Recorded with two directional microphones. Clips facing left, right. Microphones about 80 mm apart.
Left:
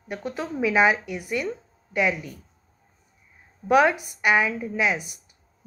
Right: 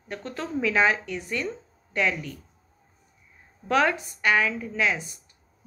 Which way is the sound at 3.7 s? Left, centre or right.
Centre.